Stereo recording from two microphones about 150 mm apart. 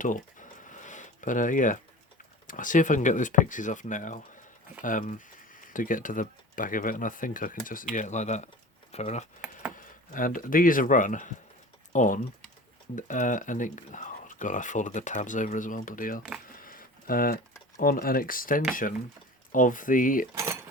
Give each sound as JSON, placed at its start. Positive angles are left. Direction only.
{"t": 0.0, "sound": "a sound", "side_deg": 60}
{"t": 2.5, "sound": "speech", "side_deg": 60}
{"t": 9.7, "sound": "speech", "side_deg": 65}
{"t": 16.6, "sound": "a sound", "side_deg": 70}
{"t": 17.7, "sound": "speech", "side_deg": 70}
{"t": 20.3, "sound": "speech", "side_deg": -20}